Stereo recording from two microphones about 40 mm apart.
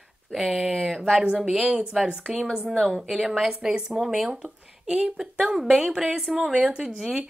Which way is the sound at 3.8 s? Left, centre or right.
Centre.